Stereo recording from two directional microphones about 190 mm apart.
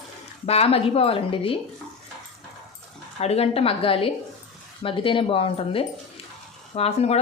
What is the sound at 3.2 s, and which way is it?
A woman's voice, 35° left (ahead or behind).